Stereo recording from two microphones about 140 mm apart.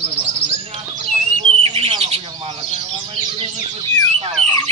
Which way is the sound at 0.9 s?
45° right (ahead or behind).